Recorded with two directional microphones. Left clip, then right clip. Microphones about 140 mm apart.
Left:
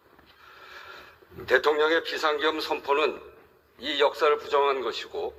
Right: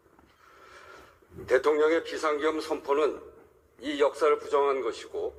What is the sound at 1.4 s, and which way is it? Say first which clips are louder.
A man's voice: left 1 dB; 25° left (ahead or behind).